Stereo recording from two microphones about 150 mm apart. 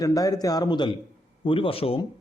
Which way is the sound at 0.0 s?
25° left (ahead or behind).